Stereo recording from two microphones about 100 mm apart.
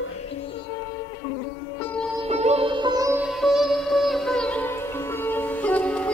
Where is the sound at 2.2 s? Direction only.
90° right.